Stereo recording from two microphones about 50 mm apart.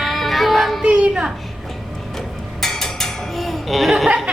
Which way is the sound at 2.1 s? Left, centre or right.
Centre.